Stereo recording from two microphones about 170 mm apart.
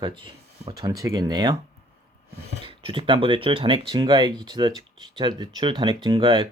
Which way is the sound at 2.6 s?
30° right (ahead or behind).